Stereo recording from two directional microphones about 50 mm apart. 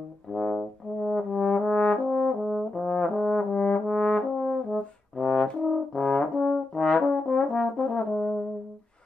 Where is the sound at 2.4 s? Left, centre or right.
Centre.